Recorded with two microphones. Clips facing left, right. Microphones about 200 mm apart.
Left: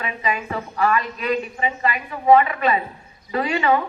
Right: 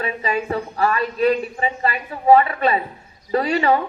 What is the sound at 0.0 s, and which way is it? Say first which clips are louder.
A man's voice: right 3 dB; 35° right (ahead or behind).